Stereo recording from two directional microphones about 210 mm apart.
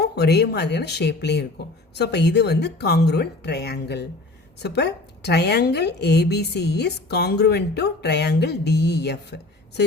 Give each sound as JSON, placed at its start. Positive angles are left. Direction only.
{"t": 0.0, "sound": "a woman's voice", "side_deg": 50}